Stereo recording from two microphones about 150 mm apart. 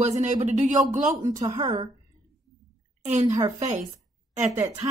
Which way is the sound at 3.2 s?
20° right (ahead or behind).